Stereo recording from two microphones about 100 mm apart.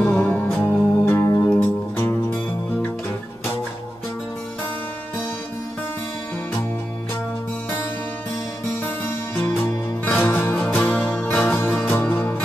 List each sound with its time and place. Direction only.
0.0 s music: 15° left (ahead or behind)
8.8 s music: 20° left (ahead or behind)